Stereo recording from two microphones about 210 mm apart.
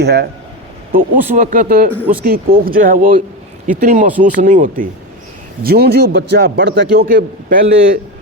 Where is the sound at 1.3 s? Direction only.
35° right (ahead or behind); by 7.1 s 55° right (ahead or behind).